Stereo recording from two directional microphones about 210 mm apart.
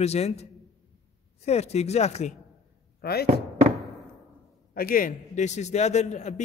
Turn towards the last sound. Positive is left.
turn(degrees=35)  # may be behind; listen again after turning